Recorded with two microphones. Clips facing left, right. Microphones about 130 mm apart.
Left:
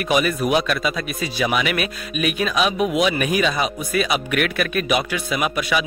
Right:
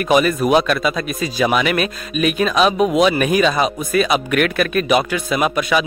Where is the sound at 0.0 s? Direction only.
40° right (ahead or behind).